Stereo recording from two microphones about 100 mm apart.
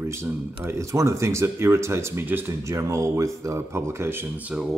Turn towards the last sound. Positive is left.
turn(degrees=-25)  # may be behind; listen again after turning